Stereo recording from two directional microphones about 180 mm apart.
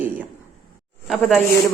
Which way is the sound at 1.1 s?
Centre (ahead or behind).